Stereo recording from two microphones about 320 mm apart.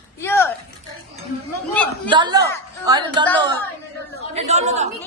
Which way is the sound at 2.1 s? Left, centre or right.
Centre.